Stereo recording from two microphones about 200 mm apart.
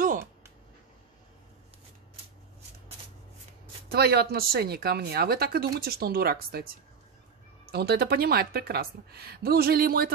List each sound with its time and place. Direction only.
3.9 s speech: 50° right (ahead or behind)
7.7 s speech: 55° right (ahead or behind)